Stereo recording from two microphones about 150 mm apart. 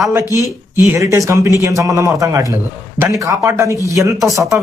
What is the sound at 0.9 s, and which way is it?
A man's voice, 20° right (ahead or behind).